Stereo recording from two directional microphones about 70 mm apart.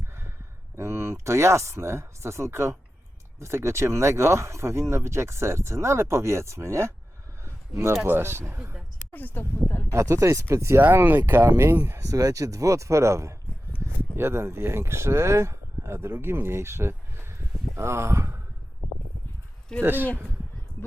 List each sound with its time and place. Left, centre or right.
0.8 s speech: right
7.4 s a sound: right
8.0 s speech: right
9.1 s speech: left
9.9 s speech: right
10.8 s speech: right
11.9 s speech: right
19.8 s speech: right